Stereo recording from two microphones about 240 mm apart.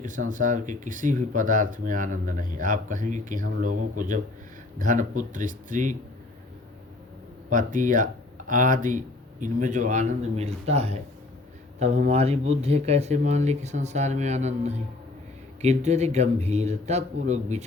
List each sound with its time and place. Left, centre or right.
0.0 s speech: right
7.5 s speech: right